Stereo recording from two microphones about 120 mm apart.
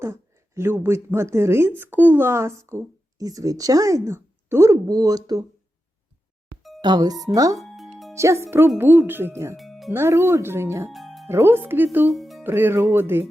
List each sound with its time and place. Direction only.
0.0 s speech: 20° right (ahead or behind)
6.6 s music: centre (ahead or behind)
6.8 s speech: 35° right (ahead or behind)
7.6 s music: centre (ahead or behind)
8.1 s speech: 25° right (ahead or behind)
9.6 s music: centre (ahead or behind)
9.9 s speech: 20° right (ahead or behind)
10.9 s music: centre (ahead or behind)
11.3 s speech: 20° right (ahead or behind)
12.0 s music: centre (ahead or behind)
12.4 s speech: 20° right (ahead or behind)